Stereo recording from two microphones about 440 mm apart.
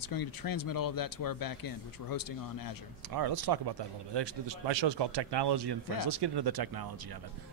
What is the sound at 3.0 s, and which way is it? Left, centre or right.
Speech, right.